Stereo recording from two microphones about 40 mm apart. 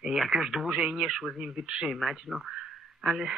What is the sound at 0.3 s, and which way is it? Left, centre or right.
Speech, centre.